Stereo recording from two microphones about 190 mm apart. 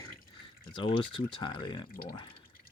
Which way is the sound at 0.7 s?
25° left (ahead or behind).